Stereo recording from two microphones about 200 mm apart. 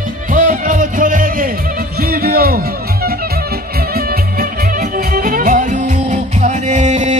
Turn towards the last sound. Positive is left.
turn(degrees=-35)  # may be behind; listen again after turning